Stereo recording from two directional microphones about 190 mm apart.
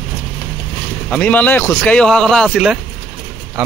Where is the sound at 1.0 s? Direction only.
5° left (ahead or behind).